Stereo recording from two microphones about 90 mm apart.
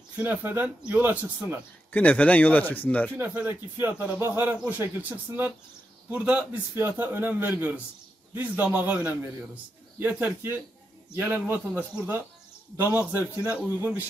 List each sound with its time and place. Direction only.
0.2 s speech: 20° right (ahead or behind)
1.9 s speech: 15° left (ahead or behind)
3.3 s speech: 20° right (ahead or behind)